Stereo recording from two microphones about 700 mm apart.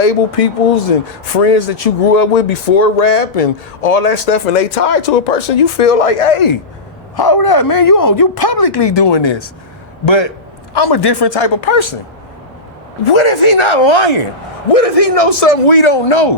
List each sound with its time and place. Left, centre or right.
0.0 s speech: left
7.2 s speech: left
13.1 s a man's voice: left
14.7 s a man's voice: left